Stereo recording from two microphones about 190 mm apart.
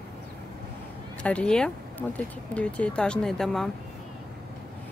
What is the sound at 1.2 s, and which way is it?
Speech, 5° left (ahead or behind).